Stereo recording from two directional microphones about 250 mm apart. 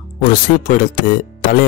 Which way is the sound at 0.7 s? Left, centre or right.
Left.